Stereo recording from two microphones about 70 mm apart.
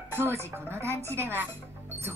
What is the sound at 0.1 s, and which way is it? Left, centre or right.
Speech, right.